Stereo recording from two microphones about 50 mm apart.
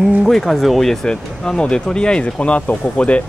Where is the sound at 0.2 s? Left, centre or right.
Centre.